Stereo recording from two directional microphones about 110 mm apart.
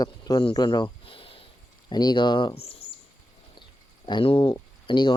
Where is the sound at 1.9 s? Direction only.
40° left (ahead or behind).